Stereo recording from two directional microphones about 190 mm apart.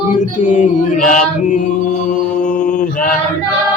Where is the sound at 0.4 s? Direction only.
40° left (ahead or behind).